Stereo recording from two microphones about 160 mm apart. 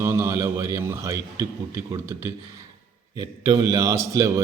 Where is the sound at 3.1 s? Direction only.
20° right (ahead or behind).